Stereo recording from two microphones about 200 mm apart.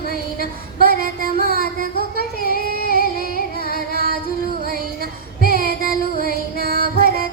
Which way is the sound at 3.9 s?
50° right (ahead or behind).